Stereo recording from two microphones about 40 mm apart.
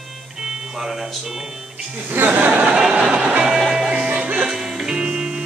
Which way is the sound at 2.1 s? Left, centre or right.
Right.